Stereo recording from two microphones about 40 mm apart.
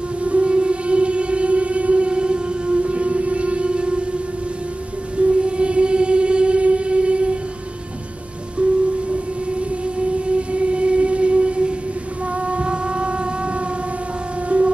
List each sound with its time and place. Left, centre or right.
0.2 s music: right
5.1 s train: right
8.6 s music: right
9.6 s a sound: right
14.5 s siren: right